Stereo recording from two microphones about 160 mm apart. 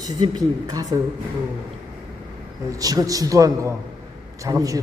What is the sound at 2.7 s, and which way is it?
A man's voice, 25° right (ahead or behind).